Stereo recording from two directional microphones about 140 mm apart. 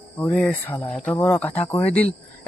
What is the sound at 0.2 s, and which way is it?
A man's voice, 10° left (ahead or behind).